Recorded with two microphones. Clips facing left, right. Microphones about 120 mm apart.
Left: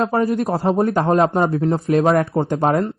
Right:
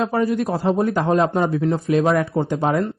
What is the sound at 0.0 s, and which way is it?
A man's voice, 40° left (ahead or behind).